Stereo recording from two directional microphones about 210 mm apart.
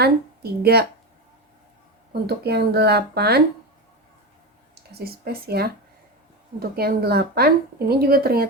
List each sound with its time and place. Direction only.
0.0 s speech: 50° right (ahead or behind)
2.2 s a woman's voice: 50° right (ahead or behind)
4.7 s a woman's voice: 50° right (ahead or behind)